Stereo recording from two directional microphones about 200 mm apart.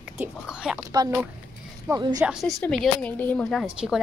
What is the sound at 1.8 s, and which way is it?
Speech, 20° right (ahead or behind).